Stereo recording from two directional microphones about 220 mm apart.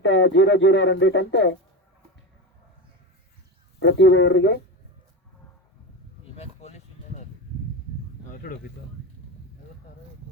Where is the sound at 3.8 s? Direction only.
55° left (ahead or behind).